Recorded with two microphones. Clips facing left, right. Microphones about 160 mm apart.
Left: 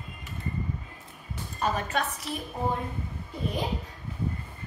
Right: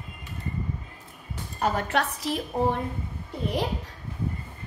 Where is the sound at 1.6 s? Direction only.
70° right (ahead or behind).